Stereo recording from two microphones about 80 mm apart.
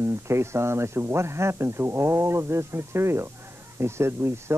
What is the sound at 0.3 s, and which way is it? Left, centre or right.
Speech, right.